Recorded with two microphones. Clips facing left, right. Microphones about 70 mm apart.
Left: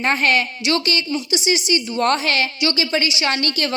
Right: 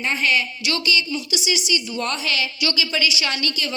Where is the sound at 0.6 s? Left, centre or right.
Left.